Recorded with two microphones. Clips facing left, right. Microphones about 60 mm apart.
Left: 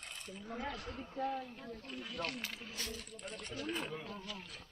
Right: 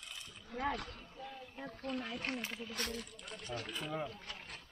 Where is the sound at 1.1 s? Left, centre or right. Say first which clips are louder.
Left 10 dB; left.